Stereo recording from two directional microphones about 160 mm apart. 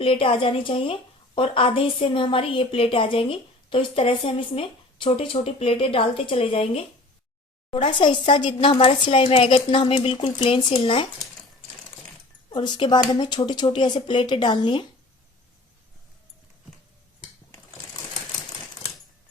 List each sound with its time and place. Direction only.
0.0 s a woman's voice: 35° left (ahead or behind)
12.5 s speech: 30° left (ahead or behind)